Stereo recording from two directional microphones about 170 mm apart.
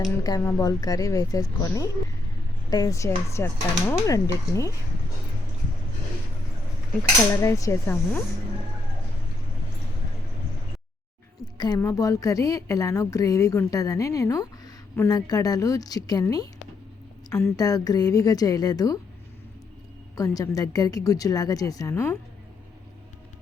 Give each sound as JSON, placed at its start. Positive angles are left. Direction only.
{"t": 0.0, "sound": "a woman's voice", "side_deg": 20}
{"t": 7.3, "sound": "speech", "side_deg": 15}
{"t": 11.5, "sound": "a woman's voice", "side_deg": 25}
{"t": 20.1, "sound": "a woman's voice", "side_deg": 20}